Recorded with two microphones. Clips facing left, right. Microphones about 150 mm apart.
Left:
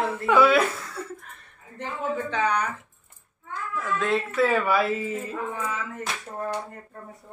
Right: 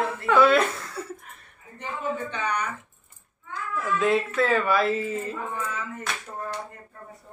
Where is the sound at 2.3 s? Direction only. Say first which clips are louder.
Left 4 dB; 90° left.